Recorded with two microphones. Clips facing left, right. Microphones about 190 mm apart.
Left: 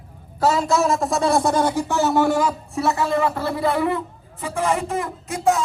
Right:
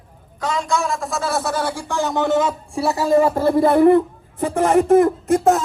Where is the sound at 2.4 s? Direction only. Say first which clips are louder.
Right 1 dB; 30° right (ahead or behind).